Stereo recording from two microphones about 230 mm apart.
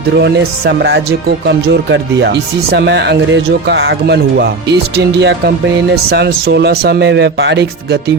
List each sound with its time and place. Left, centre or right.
0.2 s speech: right